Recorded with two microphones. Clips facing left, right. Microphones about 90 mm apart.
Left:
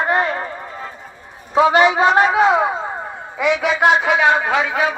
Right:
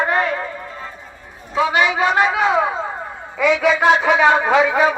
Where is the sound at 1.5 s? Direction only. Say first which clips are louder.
Left 4 dB; 35° left (ahead or behind).